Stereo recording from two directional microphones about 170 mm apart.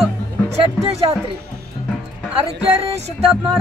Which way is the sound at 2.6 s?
35° right (ahead or behind).